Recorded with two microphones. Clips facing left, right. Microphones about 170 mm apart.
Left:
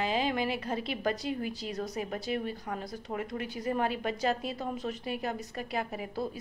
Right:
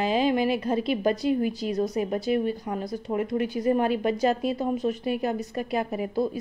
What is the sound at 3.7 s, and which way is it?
Speech, 15° right (ahead or behind).